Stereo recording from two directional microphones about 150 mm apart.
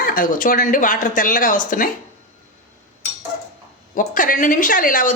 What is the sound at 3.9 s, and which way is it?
Speech, 65° left (ahead or behind).